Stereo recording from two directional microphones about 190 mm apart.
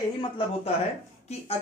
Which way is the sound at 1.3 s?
35° left (ahead or behind).